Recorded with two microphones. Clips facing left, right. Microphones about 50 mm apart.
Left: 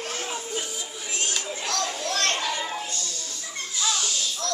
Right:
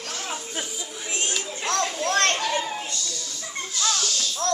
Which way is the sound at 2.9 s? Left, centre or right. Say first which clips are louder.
Right 1 dB; left.